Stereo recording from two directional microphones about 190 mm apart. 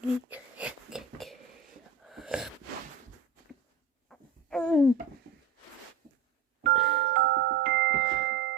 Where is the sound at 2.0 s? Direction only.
Centre (ahead or behind).